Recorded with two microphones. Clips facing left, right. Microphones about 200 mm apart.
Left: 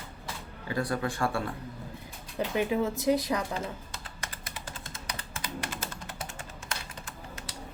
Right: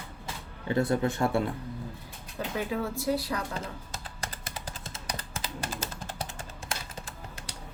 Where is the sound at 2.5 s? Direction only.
20° left (ahead or behind).